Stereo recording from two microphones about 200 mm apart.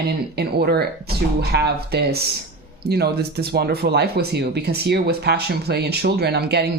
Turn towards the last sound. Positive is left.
turn(degrees=-55)  # may be behind; listen again after turning